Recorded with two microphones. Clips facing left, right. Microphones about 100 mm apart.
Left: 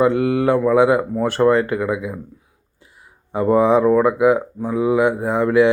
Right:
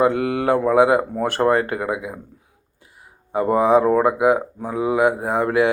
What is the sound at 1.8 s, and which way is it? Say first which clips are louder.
Speech: left 3 dB; 25° right (ahead or behind).